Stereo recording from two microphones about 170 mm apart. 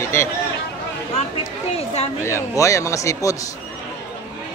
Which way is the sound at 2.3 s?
15° left (ahead or behind).